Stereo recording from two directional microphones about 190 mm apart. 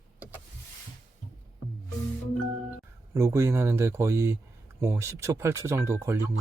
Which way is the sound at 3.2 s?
15° right (ahead or behind).